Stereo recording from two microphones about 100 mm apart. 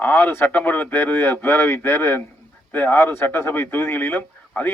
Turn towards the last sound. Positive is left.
turn(degrees=20)  # may be behind; listen again after turning